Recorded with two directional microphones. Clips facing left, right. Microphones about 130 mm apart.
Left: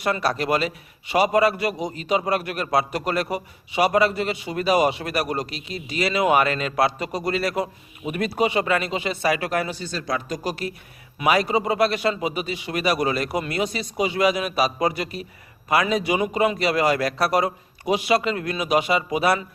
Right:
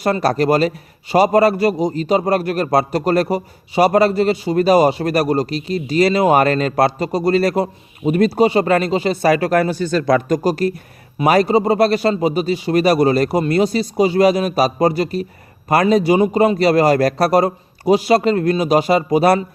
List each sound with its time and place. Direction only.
0.0 s a man's voice: 40° right (ahead or behind)
10.0 s a man's voice: 65° right (ahead or behind); by 19.5 s 40° right (ahead or behind)